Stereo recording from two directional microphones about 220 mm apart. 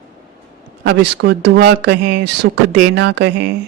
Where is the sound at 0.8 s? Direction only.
50° right (ahead or behind).